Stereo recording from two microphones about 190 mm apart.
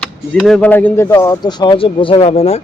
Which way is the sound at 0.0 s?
5° left (ahead or behind).